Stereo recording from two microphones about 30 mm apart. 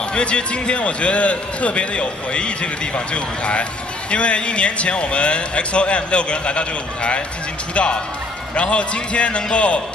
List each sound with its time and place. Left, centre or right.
0.1 s a man's voice: left